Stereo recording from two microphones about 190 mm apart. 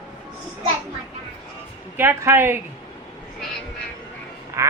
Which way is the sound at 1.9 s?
10° right (ahead or behind).